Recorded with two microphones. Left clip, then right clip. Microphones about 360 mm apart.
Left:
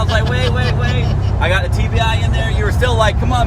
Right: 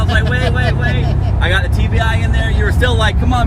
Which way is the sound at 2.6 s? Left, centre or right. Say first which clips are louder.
Left 1 dB; centre.